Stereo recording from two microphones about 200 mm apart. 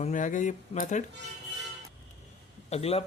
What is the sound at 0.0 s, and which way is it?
Speech, 40° left (ahead or behind).